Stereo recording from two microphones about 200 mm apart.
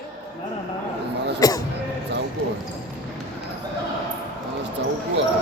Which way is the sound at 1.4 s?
20° left (ahead or behind).